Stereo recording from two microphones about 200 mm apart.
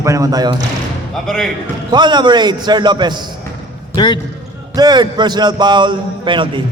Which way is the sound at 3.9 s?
20° left (ahead or behind).